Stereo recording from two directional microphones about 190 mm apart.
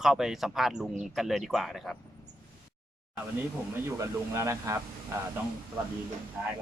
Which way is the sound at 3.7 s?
15° right (ahead or behind).